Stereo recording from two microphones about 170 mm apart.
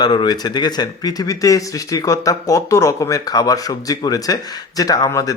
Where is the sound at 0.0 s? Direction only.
25° left (ahead or behind).